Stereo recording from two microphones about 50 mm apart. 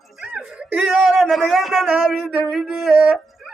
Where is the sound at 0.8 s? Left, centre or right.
Centre.